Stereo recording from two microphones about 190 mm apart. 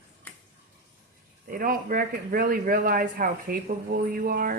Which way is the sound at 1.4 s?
50° right (ahead or behind).